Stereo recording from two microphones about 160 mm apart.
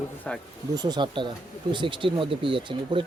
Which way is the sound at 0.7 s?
25° right (ahead or behind).